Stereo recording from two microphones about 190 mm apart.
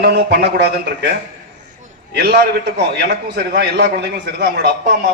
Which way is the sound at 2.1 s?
60° right (ahead or behind).